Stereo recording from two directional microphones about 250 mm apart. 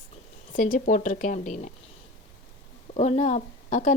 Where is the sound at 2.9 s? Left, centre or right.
Left.